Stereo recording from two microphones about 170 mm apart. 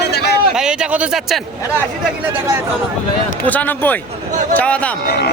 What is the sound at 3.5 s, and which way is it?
Speech, 10° left (ahead or behind).